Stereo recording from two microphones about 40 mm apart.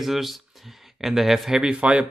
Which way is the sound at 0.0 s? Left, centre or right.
Centre.